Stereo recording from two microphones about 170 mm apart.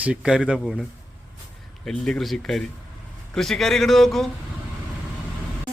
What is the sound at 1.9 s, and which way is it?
Speech, 5° left (ahead or behind).